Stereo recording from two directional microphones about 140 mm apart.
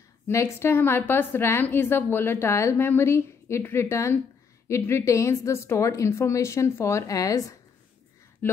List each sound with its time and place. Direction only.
0.3 s a woman's voice: 20° left (ahead or behind)